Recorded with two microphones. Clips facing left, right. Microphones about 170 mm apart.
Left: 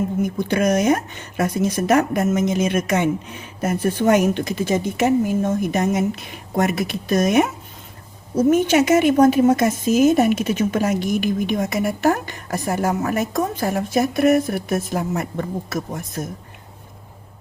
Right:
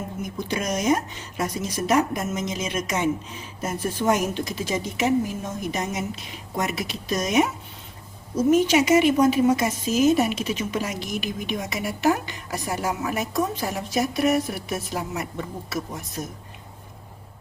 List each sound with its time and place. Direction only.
0.3 s speech: 60° left (ahead or behind)